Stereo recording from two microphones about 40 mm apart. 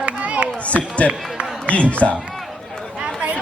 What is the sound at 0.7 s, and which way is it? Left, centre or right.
A man's voice, left.